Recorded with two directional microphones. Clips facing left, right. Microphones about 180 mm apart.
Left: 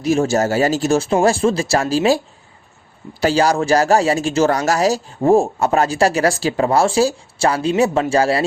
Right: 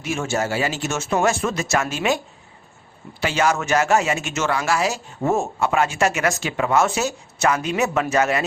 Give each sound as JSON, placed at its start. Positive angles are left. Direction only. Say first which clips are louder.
{"t": 0.0, "sound": "speech", "louder": "left 8 dB", "side_deg": 35}